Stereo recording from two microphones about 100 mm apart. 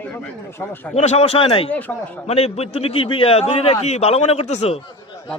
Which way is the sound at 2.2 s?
90° left.